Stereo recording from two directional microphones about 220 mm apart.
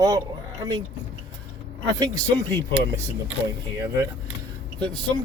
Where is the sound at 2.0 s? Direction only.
15° right (ahead or behind).